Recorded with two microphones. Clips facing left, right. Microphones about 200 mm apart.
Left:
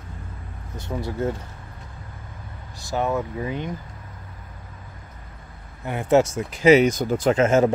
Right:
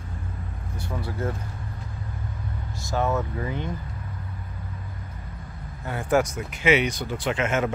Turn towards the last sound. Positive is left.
turn(degrees=35)  # may be behind; listen again after turning